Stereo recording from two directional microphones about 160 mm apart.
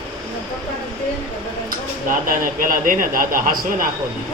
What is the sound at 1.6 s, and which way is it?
Speech, 60° right (ahead or behind).